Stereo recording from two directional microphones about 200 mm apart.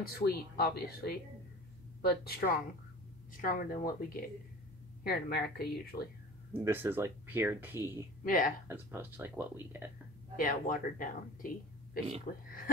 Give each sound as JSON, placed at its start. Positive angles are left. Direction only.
{"t": 0.0, "sound": "speech", "side_deg": 50}
{"t": 5.0, "sound": "speech", "side_deg": 50}
{"t": 6.5, "sound": "speech", "side_deg": -10}
{"t": 8.2, "sound": "speech", "side_deg": 45}
{"t": 8.6, "sound": "speech", "side_deg": -10}
{"t": 10.3, "sound": "speech", "side_deg": 45}